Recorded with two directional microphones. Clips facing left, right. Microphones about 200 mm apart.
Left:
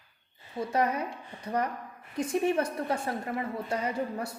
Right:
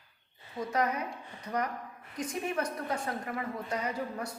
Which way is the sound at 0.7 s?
30° left (ahead or behind).